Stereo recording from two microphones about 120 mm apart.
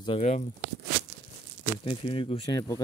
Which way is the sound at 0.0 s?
55° left (ahead or behind).